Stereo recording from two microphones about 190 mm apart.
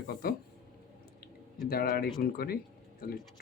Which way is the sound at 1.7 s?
50° left (ahead or behind).